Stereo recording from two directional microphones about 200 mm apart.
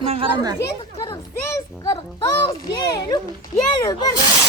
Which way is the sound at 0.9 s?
25° left (ahead or behind).